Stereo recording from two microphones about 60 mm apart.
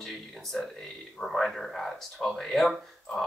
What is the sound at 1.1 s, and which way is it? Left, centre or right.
Speech, centre.